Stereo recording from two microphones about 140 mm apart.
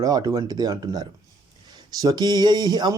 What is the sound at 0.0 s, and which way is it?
Speech, 25° right (ahead or behind).